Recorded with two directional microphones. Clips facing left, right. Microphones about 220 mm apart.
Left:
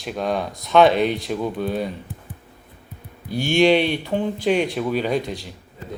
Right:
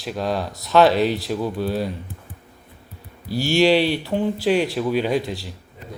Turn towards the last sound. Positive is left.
turn(degrees=-5)  # may be behind; listen again after turning